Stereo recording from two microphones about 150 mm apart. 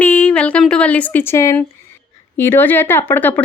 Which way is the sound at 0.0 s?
10° left (ahead or behind).